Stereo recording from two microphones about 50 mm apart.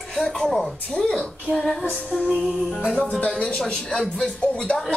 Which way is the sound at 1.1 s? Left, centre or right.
Centre.